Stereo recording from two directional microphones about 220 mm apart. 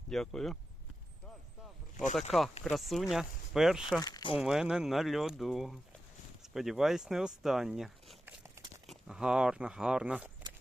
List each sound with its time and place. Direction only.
0.1 s speech: centre (ahead or behind)
2.6 s speech: centre (ahead or behind)
4.0 s speech: 20° left (ahead or behind)
4.4 s speech: 5° right (ahead or behind)
8.4 s crumpling: 15° right (ahead or behind)
8.9 s speech: 5° right (ahead or behind)